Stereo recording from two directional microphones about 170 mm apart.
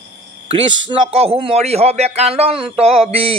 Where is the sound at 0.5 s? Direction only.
35° right (ahead or behind).